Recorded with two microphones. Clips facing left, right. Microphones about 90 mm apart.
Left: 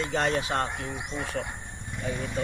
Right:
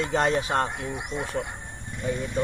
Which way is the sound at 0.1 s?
35° right (ahead or behind).